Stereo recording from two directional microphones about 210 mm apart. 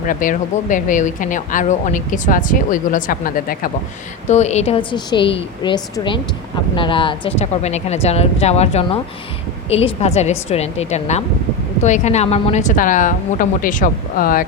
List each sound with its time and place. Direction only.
0.1 s a woman's voice: 40° left (ahead or behind)